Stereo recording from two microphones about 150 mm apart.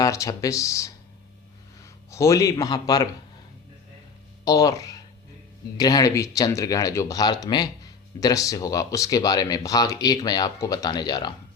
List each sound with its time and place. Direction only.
0.0 s speech: 20° left (ahead or behind)
4.4 s speech: 25° left (ahead or behind)